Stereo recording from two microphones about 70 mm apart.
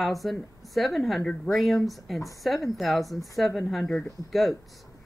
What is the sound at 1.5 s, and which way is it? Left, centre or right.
Speech, centre.